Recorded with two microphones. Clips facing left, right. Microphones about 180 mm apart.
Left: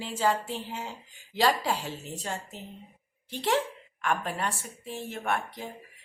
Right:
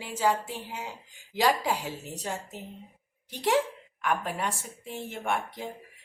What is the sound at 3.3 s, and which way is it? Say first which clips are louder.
A woman's voice: right 2 dB; 15° right (ahead or behind).